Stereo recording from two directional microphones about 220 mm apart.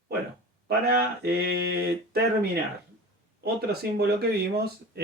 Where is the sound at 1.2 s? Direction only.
45° right (ahead or behind).